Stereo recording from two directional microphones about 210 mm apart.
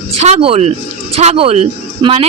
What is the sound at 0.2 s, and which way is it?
Speech, 30° right (ahead or behind).